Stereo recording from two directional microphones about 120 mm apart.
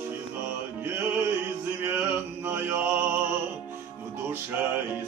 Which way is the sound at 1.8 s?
20° right (ahead or behind).